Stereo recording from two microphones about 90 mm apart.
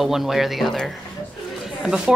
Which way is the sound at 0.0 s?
Centre (ahead or behind).